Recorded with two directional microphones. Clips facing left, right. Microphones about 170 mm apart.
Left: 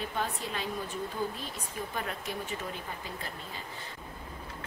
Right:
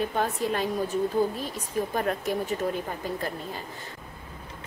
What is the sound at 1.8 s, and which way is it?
Speech, 45° right (ahead or behind).